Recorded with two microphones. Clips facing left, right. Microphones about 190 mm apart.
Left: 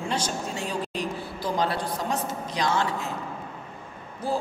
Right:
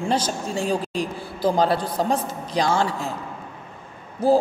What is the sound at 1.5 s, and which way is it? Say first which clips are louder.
A woman's voice: right 3 dB; 35° right (ahead or behind).